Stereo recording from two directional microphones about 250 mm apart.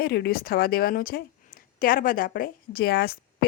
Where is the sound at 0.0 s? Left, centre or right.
Left.